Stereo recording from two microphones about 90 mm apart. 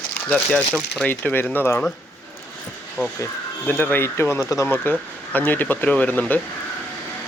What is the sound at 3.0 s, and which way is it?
Speech, 25° left (ahead or behind).